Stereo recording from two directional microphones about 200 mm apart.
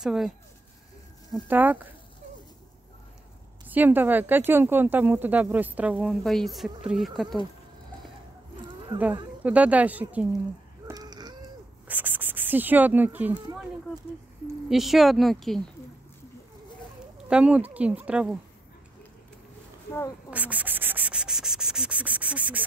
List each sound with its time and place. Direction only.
0.0 s speech: 5° right (ahead or behind)
1.5 s speech: 10° right (ahead or behind)
3.6 s speech: 10° right (ahead or behind)
9.4 s speech: 5° right (ahead or behind)
10.9 s a sound: 20° right (ahead or behind)
11.9 s speech: 10° right (ahead or behind)
14.7 s speech: centre (ahead or behind)
17.3 s speech: 5° right (ahead or behind)
20.2 s sanding: 5° right (ahead or behind)